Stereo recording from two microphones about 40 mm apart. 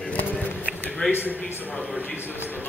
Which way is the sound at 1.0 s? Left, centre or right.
Left.